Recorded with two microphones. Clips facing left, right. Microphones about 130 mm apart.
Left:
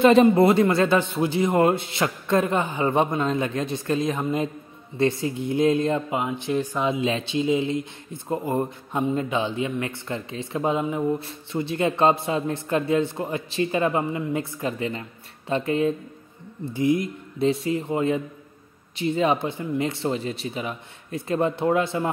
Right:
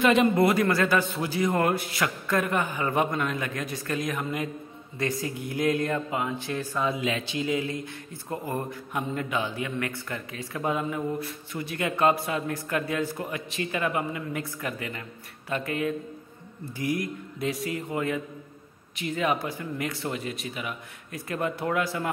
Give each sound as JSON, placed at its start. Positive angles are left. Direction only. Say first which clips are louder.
{"t": 0.0, "sound": "speech", "louder": "left 6 dB", "side_deg": 30}